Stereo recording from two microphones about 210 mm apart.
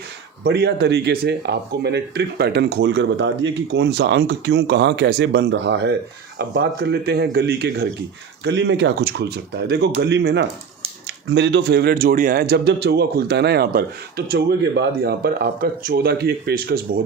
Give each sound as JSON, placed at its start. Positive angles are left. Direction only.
{"t": 0.4, "sound": "speech", "side_deg": -50}